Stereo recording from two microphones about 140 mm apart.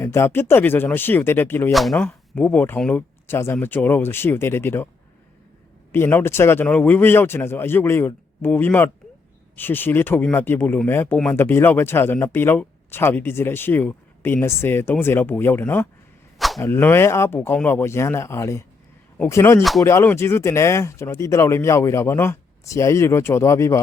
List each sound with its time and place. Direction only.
0.0 s speech: 20° left (ahead or behind)
1.7 s speech: centre (ahead or behind); by 4.9 s 15° left (ahead or behind)
5.9 s speech: 15° left (ahead or behind)